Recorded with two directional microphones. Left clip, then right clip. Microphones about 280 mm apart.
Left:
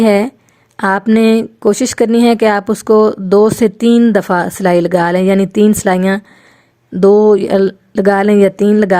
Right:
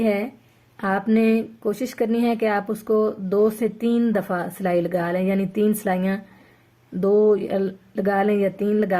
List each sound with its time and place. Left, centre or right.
0.0 s speech: left